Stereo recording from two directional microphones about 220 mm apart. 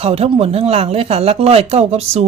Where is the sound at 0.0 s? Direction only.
25° right (ahead or behind).